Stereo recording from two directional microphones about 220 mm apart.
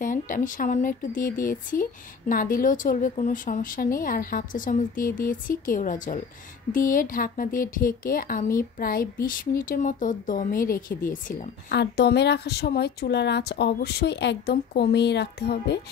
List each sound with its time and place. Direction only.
0.0 s speech: 35° left (ahead or behind)